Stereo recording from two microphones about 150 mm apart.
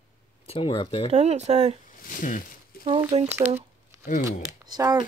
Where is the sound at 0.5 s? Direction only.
35° left (ahead or behind).